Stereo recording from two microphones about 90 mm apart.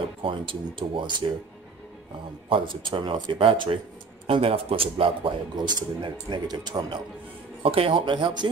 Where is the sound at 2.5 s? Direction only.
70° right (ahead or behind).